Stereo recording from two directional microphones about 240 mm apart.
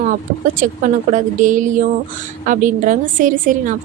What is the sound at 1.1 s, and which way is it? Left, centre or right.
A woman's voice, right.